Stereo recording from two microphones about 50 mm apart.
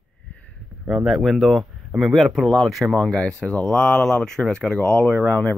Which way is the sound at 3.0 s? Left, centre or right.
Centre.